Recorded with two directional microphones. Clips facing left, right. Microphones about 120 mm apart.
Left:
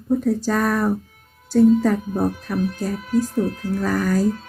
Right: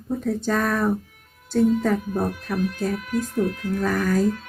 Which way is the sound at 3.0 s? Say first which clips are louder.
Left 7 dB; 35° left (ahead or behind).